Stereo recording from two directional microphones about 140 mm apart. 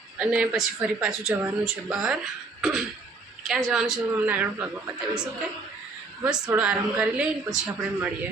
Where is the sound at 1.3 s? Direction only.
15° right (ahead or behind).